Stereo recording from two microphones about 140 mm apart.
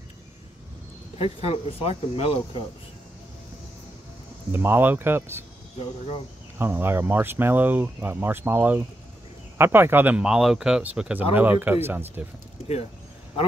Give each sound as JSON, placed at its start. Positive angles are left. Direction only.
{"t": 1.1, "sound": "speech", "side_deg": 45}
{"t": 4.5, "sound": "speech", "side_deg": -15}
{"t": 6.6, "sound": "speech", "side_deg": -15}